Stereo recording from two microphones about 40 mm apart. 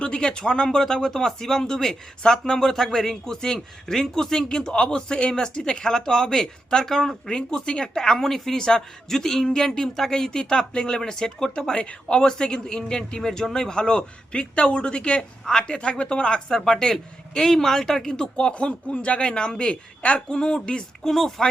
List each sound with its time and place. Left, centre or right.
0.0 s speech: left; by 7.2 s centre
7.3 s a man's voice: centre
8.2 s speech: centre
11.8 s a man's voice: left
18.3 s a man's voice: left
21.0 s speech: centre